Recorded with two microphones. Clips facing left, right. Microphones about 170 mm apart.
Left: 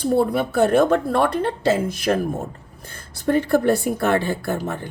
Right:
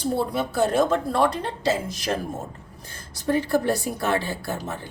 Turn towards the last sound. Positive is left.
turn(degrees=55)  # may be behind; listen again after turning